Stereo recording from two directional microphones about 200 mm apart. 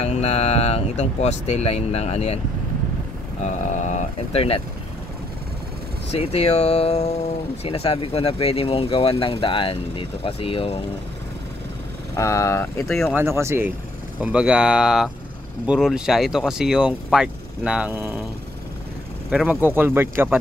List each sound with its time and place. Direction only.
0.0 s speech: 30° left (ahead or behind)
3.4 s speech: 35° left (ahead or behind)
6.1 s speech: 30° left (ahead or behind)
12.2 s speech: 15° left (ahead or behind)
13.1 s speech: 10° right (ahead or behind)
19.3 s speech: 10° right (ahead or behind)